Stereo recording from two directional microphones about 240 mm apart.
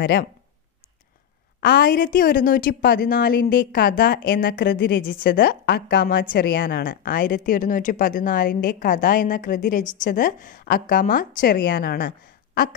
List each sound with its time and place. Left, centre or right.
0.0 s a woman's voice: left
1.6 s a woman's voice: left